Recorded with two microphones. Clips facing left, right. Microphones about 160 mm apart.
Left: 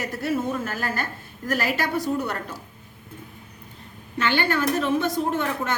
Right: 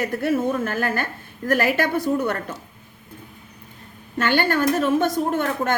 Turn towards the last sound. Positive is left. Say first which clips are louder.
# right 3 dB
turn(degrees=-50)  # may be behind; listen again after turning